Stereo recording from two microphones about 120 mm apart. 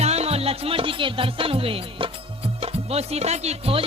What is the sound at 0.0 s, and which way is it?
Speech, 60° right (ahead or behind).